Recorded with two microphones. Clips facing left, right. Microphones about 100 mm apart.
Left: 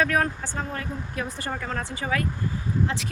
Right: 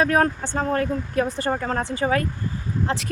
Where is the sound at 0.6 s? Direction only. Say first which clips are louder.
Right 10 dB; 50° right (ahead or behind).